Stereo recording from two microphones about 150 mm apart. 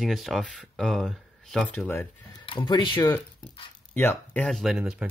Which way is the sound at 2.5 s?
35° left (ahead or behind).